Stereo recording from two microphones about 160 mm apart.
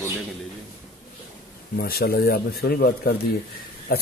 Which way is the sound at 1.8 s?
75° left (ahead or behind).